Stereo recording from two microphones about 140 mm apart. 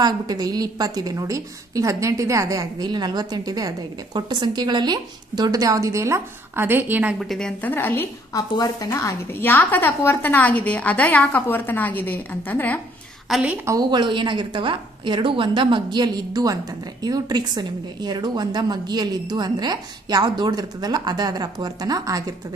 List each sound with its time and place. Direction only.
0.0 s a woman's voice: 30° right (ahead or behind); by 7.2 s 10° right (ahead or behind)
7.2 s a woman's voice: 5° left (ahead or behind)
7.7 s a woman's voice: 15° left (ahead or behind)
13.3 s a woman's voice: 10° right (ahead or behind)
13.7 s a woman's voice: 30° right (ahead or behind)